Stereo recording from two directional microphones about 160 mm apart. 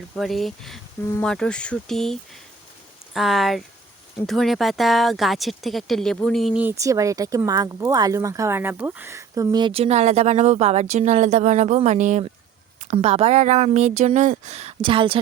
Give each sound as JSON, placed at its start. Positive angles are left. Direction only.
{"t": 0.2, "sound": "speech", "side_deg": 0}
{"t": 3.2, "sound": "speech", "side_deg": 0}